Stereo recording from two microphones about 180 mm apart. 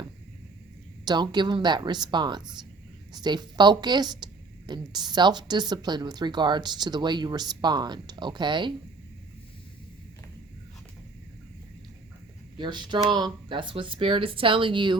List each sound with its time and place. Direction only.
1.0 s a woman's voice: 25° right (ahead or behind)
12.5 s a woman's voice: 25° right (ahead or behind)